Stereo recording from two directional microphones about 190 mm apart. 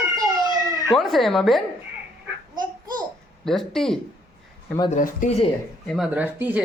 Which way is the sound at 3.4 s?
Centre (ahead or behind).